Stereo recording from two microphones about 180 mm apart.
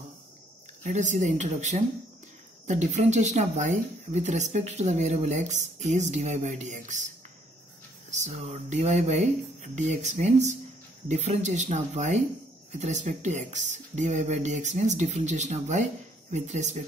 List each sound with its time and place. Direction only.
0.8 s speech: 40° right (ahead or behind)
8.1 s speech: 40° right (ahead or behind)